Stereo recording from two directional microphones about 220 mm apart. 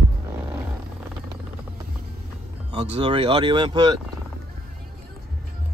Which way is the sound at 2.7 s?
25° right (ahead or behind).